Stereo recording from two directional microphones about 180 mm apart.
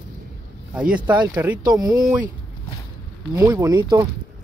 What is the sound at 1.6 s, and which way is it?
Speech, 20° right (ahead or behind).